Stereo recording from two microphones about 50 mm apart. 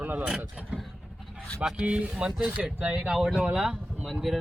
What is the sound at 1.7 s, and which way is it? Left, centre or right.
Speech, right.